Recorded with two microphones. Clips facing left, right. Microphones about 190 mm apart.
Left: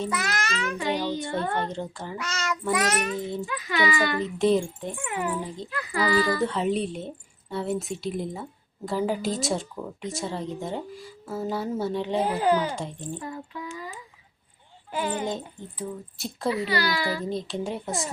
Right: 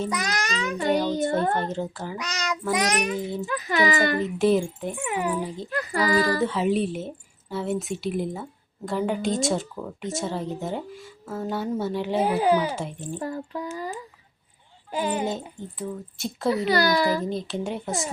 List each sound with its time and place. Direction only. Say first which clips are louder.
0.1 s a child's voice: right 1 dB; 15° right (ahead or behind)
0.8 s speech: right 7 dB; 50° right (ahead or behind)
1.7 s a woman's voice: right 3 dB; 5° right (ahead or behind)
2.1 s a child's voice: left 1 dB; 15° right (ahead or behind)
3.4 s speech: right 4 dB; 45° right (ahead or behind)
4.4 s a woman's voice: even; 5° right (ahead or behind)
4.9 s a child's voice: right 3 dB; 20° right (ahead or behind)
6.1 s speech: right 1 dB; 40° right (ahead or behind)
6.4 s a woman's voice: right 2 dB; centre (ahead or behind)
13.1 s speech: right 5 dB; 40° right (ahead or behind)
14.9 s a child's voice: right 2 dB; 15° right (ahead or behind)
15.3 s a woman's voice: right 1 dB; centre (ahead or behind)
16.5 s speech: right 4 dB; 40° right (ahead or behind)
17.2 s a woman's voice: right 1 dB; centre (ahead or behind)